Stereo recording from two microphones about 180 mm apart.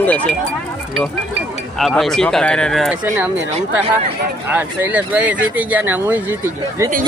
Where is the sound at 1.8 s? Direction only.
Centre (ahead or behind).